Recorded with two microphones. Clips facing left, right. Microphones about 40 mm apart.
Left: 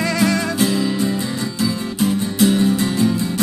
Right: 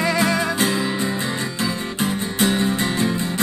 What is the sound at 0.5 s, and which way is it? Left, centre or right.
Music, right.